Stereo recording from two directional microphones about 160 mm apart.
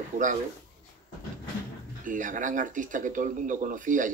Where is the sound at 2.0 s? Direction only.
55° right (ahead or behind).